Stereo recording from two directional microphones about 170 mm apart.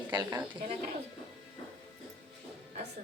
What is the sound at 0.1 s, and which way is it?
Speech, 20° right (ahead or behind).